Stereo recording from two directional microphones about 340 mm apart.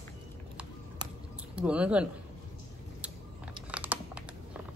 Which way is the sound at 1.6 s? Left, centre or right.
Centre.